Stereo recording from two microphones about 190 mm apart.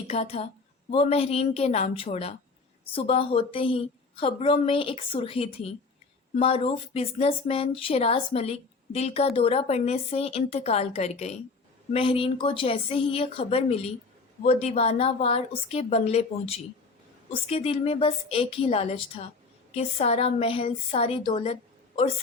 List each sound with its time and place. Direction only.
0.1 s a woman's voice: 35° left (ahead or behind)